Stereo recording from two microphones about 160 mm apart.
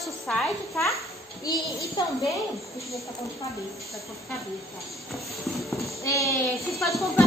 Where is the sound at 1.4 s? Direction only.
25° left (ahead or behind).